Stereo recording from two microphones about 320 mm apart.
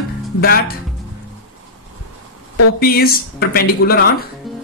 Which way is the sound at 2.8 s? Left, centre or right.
Left.